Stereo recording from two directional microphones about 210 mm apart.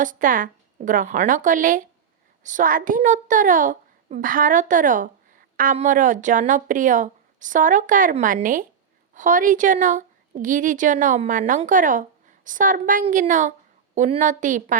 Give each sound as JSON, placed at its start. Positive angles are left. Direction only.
{"t": 0.0, "sound": "a child's voice", "side_deg": -40}